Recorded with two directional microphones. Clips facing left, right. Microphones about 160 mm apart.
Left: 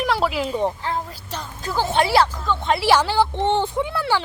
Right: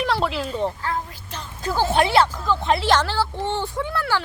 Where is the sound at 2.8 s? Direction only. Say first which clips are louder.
Left 3 dB; 10° left (ahead or behind).